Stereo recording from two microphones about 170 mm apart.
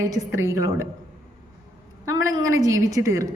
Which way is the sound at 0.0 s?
20° right (ahead or behind).